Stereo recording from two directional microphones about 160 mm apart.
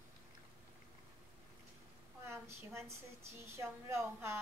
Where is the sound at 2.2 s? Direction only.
15° right (ahead or behind).